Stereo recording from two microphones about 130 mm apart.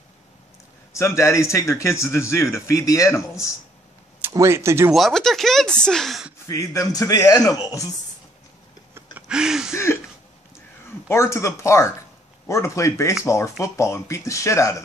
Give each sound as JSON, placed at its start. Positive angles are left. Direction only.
{"t": 0.9, "sound": "a man's voice", "side_deg": 20}
{"t": 4.3, "sound": "speech", "side_deg": -20}
{"t": 4.9, "sound": "speech", "side_deg": 0}
{"t": 6.4, "sound": "a man's voice", "side_deg": 25}
{"t": 9.3, "sound": "a sound", "side_deg": -5}
{"t": 11.1, "sound": "a man's voice", "side_deg": 20}